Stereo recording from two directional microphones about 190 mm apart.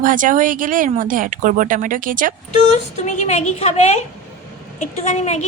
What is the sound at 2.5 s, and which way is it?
A woman's voice, 40° left (ahead or behind).